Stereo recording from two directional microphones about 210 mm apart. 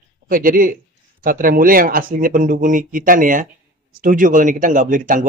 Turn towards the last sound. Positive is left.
turn(degrees=-40)  # may be behind; listen again after turning